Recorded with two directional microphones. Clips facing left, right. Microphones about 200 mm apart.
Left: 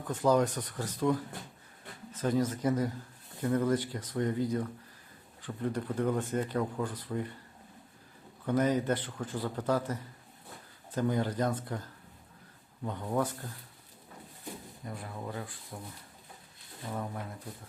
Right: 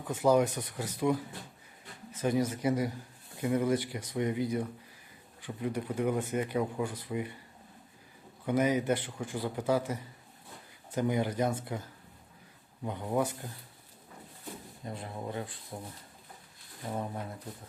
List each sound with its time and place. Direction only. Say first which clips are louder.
0.1 s speech: right 1 dB; 10° right (ahead or behind)
2.1 s speech: even; 10° right (ahead or behind)
8.4 s speech: even; 10° right (ahead or behind)
12.8 s speech: right 1 dB; 15° right (ahead or behind)
14.8 s speech: right 2 dB; 25° right (ahead or behind)
16.9 s speech: right 1 dB; 25° right (ahead or behind)